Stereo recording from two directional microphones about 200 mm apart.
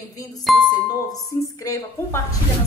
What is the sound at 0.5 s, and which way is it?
Speech, centre (ahead or behind).